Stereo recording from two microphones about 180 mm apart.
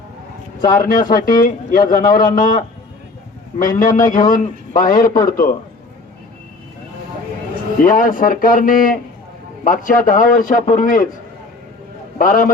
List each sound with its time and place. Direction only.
0.6 s a man's voice: 50° left (ahead or behind)
7.9 s a man's voice: 50° left (ahead or behind)
12.2 s a man's voice: 50° left (ahead or behind)